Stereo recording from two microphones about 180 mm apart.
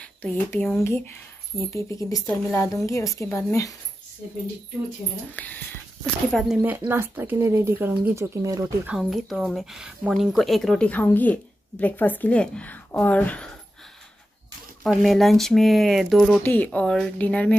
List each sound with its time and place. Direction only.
0.0 s speech: 5° left (ahead or behind)
1.7 s a woman's voice: 15° left (ahead or behind)
5.3 s a woman's voice: 10° left (ahead or behind)
6.3 s speech: 5° right (ahead or behind)
8.9 s a woman's voice: centre (ahead or behind)
14.8 s a woman's voice: centre (ahead or behind)